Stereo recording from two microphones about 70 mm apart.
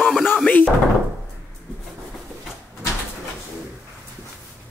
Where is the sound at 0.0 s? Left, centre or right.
Centre.